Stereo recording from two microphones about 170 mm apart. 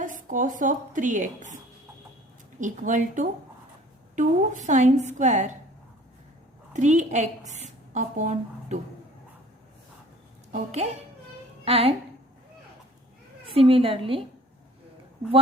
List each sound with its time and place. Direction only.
0.0 s a woman's voice: 50° right (ahead or behind)
6.7 s a woman's voice: 45° right (ahead or behind)
10.5 s a woman's voice: 40° right (ahead or behind)
13.5 s a woman's voice: 35° right (ahead or behind)